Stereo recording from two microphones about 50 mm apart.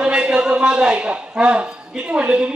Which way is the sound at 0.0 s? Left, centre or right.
Centre.